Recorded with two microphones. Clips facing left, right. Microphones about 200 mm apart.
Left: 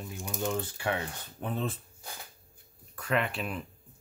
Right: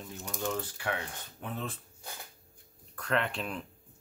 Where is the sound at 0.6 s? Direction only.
25° left (ahead or behind).